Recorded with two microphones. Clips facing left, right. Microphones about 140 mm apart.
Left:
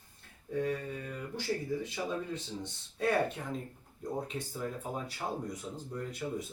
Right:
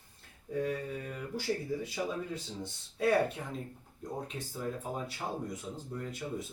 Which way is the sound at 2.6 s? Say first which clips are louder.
Right 3 dB; 5° right (ahead or behind).